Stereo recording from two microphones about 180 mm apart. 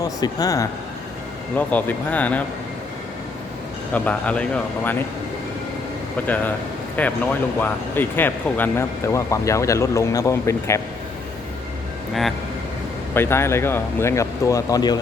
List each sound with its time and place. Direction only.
0.0 s speech: 20° left (ahead or behind)
1.5 s speech: 10° left (ahead or behind)
3.9 s speech: 10° left (ahead or behind)
6.2 s speech: 10° left (ahead or behind)
13.1 s speech: 15° left (ahead or behind)